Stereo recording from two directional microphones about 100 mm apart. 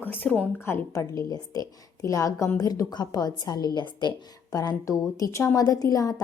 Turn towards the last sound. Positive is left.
turn(degrees=35)  # may be behind; listen again after turning